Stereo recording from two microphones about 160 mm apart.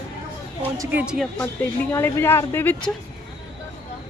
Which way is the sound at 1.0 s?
5° right (ahead or behind).